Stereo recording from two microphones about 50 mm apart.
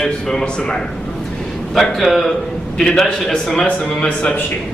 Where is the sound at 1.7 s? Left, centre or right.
Centre.